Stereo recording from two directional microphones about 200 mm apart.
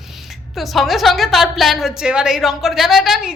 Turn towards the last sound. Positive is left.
turn(degrees=0)  # may be behind; listen again after turning